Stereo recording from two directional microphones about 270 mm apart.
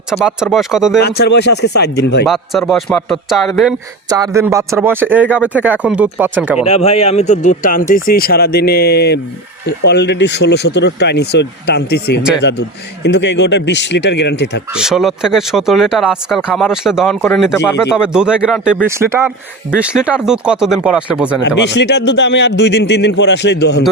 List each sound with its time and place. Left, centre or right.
0.1 s speech: centre
1.0 s speech: left
2.2 s speech: centre
4.2 s speech: centre
6.7 s a man's voice: left
14.7 s speech: centre
21.6 s speech: left